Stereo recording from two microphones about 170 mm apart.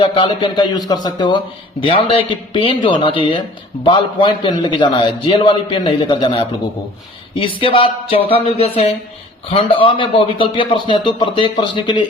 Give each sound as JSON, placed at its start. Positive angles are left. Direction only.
{"t": 0.0, "sound": "a man's voice", "side_deg": 30}